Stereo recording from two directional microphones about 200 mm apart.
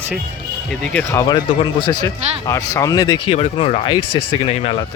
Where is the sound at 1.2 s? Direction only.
20° left (ahead or behind).